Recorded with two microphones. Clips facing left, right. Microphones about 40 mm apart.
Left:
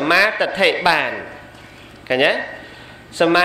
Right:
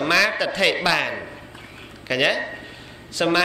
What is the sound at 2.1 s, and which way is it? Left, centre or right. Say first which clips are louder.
A man's voice: left 4 dB; left.